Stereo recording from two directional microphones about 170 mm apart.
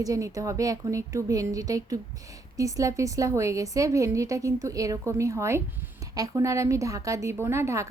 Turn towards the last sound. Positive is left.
turn(degrees=-15)  # may be behind; listen again after turning